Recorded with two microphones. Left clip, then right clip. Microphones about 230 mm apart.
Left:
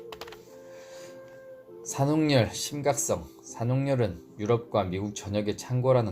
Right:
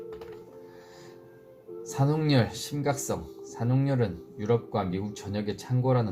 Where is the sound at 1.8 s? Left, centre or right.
Left.